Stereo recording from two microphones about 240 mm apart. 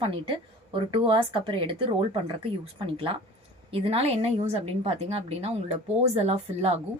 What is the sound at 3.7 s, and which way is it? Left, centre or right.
A woman's voice, right.